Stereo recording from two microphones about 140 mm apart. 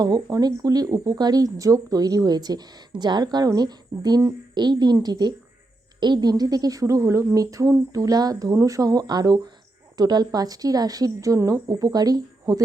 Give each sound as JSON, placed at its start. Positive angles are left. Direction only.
{"t": 0.0, "sound": "speech", "side_deg": -25}